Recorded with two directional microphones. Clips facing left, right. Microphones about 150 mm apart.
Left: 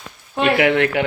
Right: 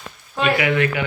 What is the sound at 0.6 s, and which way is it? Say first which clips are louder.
Speech: left 4 dB; 70° left (ahead or behind).